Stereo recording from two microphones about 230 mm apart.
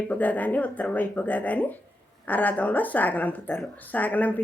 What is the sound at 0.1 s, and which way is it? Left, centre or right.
Speech, centre.